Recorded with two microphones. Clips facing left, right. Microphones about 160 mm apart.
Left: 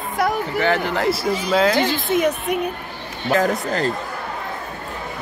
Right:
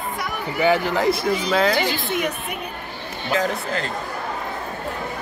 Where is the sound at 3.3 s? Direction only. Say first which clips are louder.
Left 4 dB; 45° left (ahead or behind).